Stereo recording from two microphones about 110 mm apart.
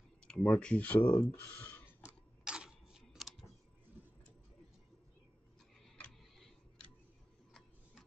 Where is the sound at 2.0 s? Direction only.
10° right (ahead or behind).